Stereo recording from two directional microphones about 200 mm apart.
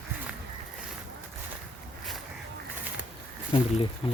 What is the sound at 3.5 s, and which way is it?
Speech, 25° left (ahead or behind).